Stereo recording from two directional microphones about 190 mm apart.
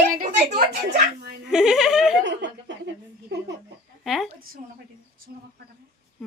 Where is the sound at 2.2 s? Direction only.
75° right (ahead or behind).